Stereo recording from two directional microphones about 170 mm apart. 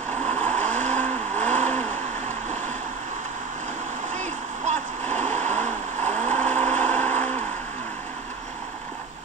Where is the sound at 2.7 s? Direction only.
45° right (ahead or behind).